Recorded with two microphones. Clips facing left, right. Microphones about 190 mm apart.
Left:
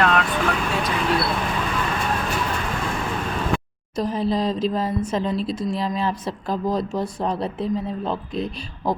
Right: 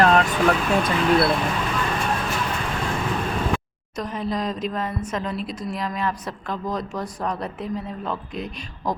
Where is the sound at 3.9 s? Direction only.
30° left (ahead or behind).